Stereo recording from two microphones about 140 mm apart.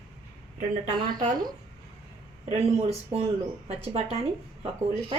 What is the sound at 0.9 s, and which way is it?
Speech, 35° right (ahead or behind).